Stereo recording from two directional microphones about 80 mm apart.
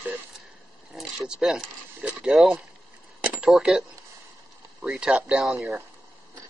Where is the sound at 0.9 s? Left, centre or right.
Centre.